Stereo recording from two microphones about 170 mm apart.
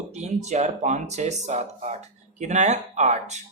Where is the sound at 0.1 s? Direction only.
40° right (ahead or behind).